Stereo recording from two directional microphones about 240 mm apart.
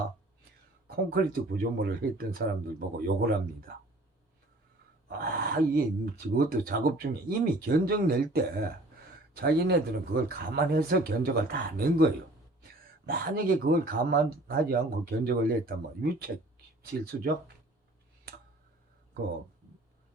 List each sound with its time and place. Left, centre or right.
0.9 s speech: right
5.0 s speech: right